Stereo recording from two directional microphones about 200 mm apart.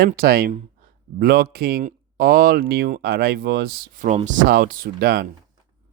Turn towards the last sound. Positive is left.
turn(degrees=-50)  # may be behind; listen again after turning